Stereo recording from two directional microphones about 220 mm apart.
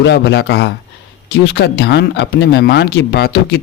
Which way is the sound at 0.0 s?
50° left (ahead or behind).